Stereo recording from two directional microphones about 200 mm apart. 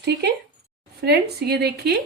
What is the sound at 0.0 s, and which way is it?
A woman's voice, 55° right (ahead or behind).